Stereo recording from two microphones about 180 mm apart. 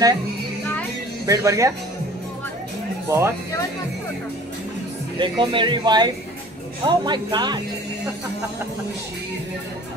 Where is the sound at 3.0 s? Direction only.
15° right (ahead or behind).